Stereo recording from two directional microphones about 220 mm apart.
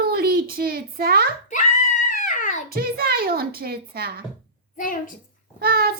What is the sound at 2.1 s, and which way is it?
Babbling, 35° left (ahead or behind).